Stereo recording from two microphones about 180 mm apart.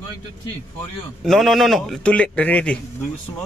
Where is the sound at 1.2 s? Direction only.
Centre (ahead or behind).